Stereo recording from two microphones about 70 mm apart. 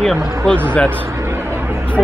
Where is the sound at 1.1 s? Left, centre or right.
Right.